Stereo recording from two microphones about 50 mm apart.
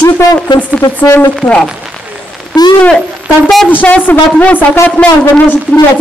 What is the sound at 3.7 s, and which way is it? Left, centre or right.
Speech, left.